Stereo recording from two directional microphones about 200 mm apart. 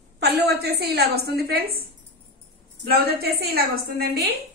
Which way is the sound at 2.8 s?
50° right (ahead or behind).